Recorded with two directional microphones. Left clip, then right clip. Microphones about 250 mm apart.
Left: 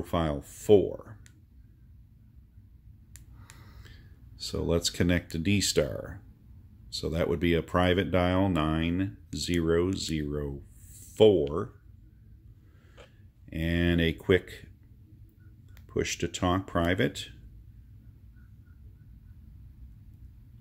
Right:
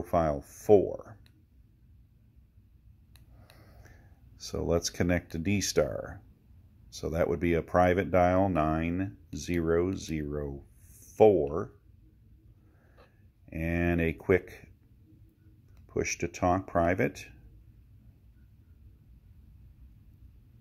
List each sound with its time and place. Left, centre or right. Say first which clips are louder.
0.0 s speech: right 3 dB; centre
3.5 s a sound: left 3 dB; centre
4.4 s speech: left 1 dB; centre
12.9 s speech: left 7 dB; centre
15.9 s speech: left 1 dB; centre